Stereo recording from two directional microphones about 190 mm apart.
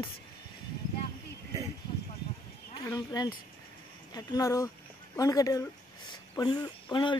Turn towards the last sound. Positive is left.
turn(degrees=25)  # may be behind; listen again after turning